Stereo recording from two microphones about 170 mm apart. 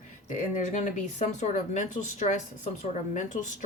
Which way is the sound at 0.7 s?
45° left (ahead or behind).